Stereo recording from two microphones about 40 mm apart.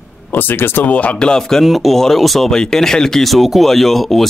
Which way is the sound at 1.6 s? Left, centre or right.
Centre.